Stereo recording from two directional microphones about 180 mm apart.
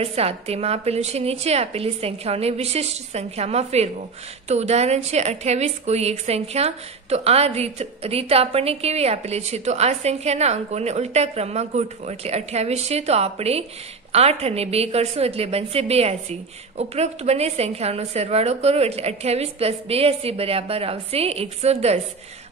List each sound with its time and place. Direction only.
0.0 s a woman's voice: 35° right (ahead or behind)